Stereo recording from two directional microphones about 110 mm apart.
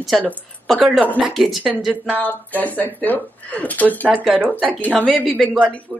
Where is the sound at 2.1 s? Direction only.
15° left (ahead or behind).